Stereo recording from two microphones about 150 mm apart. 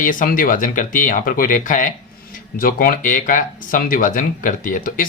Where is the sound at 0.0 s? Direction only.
65° left (ahead or behind).